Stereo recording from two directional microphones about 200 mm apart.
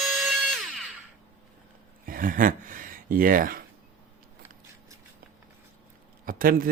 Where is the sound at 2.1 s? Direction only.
45° right (ahead or behind).